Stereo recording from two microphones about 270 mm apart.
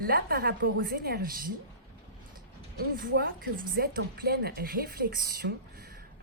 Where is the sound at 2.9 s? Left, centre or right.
Right.